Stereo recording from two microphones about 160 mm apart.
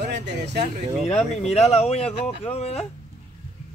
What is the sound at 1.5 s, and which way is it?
Speech, 40° left (ahead or behind).